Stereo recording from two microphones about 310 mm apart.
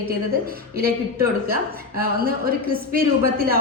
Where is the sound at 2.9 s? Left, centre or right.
Right.